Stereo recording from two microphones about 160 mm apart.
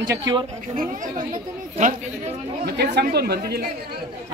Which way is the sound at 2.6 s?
90° right.